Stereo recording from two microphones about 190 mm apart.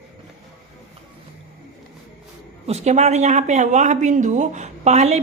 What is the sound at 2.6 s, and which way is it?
A woman's voice, 35° right (ahead or behind).